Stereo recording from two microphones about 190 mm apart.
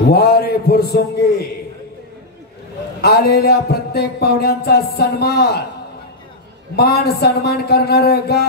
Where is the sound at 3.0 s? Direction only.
55° left (ahead or behind).